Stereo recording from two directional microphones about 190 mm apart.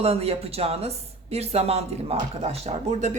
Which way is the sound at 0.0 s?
30° right (ahead or behind).